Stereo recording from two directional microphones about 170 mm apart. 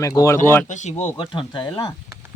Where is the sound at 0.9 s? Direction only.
10° left (ahead or behind).